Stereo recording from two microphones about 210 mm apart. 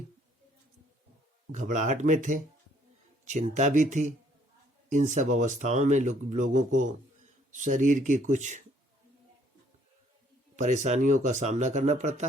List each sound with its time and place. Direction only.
1.5 s speech: 35° right (ahead or behind)
10.6 s speech: 35° right (ahead or behind)